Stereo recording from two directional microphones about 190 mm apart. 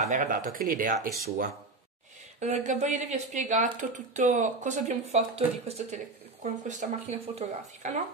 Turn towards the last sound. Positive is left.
turn(degrees=-40)  # may be behind; listen again after turning